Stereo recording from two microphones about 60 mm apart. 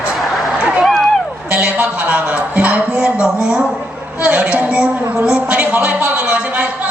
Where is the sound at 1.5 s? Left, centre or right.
Right.